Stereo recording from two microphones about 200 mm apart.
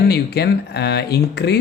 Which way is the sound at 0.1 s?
55° left (ahead or behind).